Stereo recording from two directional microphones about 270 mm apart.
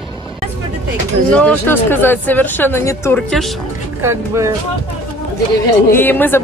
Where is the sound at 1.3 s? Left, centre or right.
Centre.